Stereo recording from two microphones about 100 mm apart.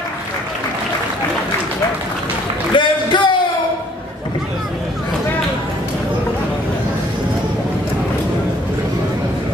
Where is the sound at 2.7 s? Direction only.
55° left (ahead or behind).